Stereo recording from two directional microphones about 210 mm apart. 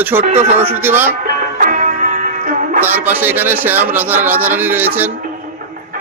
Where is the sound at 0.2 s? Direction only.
30° right (ahead or behind).